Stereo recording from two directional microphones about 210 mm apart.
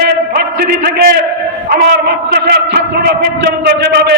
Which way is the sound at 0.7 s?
50° right (ahead or behind).